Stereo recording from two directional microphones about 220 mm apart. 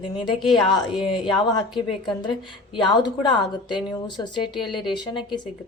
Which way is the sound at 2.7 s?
20° left (ahead or behind).